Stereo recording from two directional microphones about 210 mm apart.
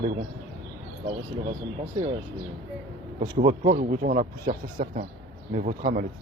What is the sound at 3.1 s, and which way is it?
Speech, 30° right (ahead or behind).